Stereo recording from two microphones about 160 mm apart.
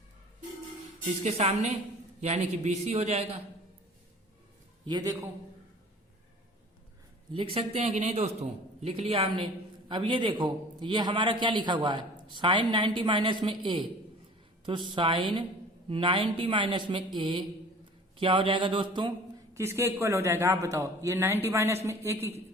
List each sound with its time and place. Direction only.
1.2 s a man's voice: 40° right (ahead or behind)
4.9 s a man's voice: 25° right (ahead or behind)
7.3 s a man's voice: 35° right (ahead or behind)
19.5 s a man's voice: 15° right (ahead or behind)